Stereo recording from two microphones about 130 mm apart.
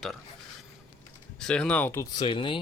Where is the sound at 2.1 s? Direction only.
40° left (ahead or behind).